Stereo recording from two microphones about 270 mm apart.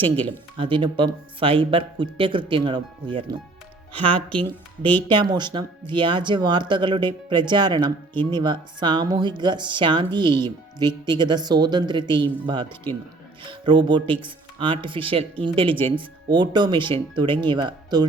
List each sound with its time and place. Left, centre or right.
0.3 s speech: centre
4.8 s speech: centre
5.0 s speech: centre